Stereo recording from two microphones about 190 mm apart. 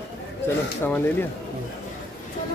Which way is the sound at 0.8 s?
10° left (ahead or behind).